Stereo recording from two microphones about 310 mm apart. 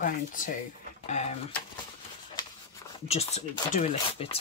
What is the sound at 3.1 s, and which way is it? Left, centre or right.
Speech, centre.